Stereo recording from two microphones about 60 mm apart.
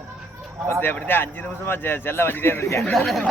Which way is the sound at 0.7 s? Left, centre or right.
Left.